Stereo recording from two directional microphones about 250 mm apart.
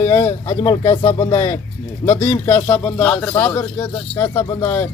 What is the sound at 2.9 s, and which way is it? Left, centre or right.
Speech, centre.